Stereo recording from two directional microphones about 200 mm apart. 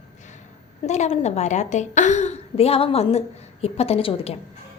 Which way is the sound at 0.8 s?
35° left (ahead or behind).